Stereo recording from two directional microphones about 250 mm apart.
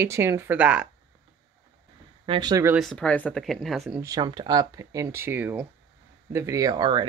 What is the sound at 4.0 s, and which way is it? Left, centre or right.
Speech, centre.